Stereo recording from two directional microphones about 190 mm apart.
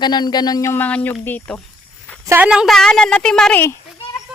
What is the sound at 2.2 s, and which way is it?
Speech, 10° right (ahead or behind).